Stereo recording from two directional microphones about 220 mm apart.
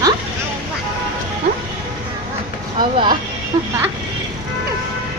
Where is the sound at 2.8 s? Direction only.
25° right (ahead or behind).